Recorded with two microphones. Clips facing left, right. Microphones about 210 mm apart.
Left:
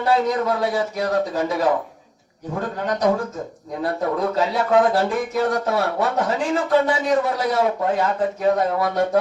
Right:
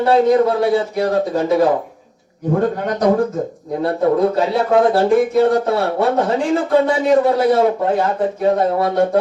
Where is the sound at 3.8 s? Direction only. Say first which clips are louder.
Right 7 dB; 30° right (ahead or behind).